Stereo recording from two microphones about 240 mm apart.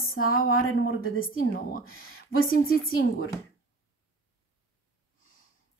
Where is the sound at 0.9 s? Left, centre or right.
Left.